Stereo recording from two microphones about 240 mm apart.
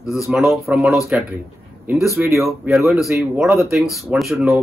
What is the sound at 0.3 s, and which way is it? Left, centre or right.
A man's voice, centre.